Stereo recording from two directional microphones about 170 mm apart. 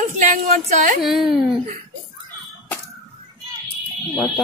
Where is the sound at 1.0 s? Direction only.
Centre (ahead or behind).